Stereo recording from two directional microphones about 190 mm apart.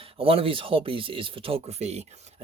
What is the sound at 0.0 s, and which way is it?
Speech, 30° right (ahead or behind).